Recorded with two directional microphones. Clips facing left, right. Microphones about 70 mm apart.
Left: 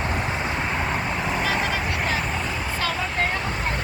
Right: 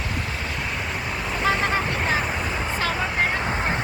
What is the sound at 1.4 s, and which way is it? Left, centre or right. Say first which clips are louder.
Vehicle: right 6 dB; right.